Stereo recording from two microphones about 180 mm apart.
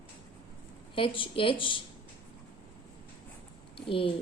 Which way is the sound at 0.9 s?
30° left (ahead or behind).